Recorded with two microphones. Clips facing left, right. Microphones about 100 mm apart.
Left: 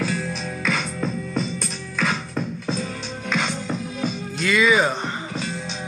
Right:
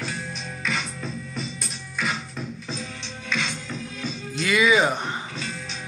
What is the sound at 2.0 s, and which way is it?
Music, 75° left (ahead or behind).